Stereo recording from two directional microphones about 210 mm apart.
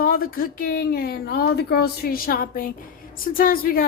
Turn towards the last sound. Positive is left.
turn(degrees=45)  # may be behind; listen again after turning